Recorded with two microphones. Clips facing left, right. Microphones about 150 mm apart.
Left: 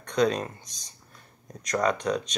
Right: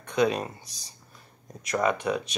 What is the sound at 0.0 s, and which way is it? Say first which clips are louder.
Speech: even; 5° right (ahead or behind).